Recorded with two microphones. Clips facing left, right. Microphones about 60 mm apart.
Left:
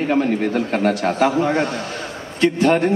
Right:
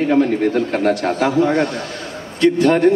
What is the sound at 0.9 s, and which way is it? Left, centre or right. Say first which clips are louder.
A man's voice: left 1 dB; left.